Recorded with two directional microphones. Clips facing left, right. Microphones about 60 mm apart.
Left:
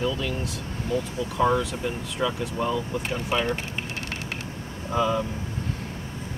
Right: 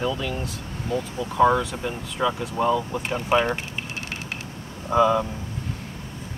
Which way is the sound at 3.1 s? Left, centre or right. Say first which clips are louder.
Right 5 dB; right.